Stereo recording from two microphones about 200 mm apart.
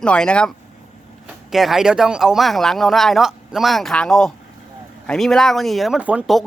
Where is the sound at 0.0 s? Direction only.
5° left (ahead or behind).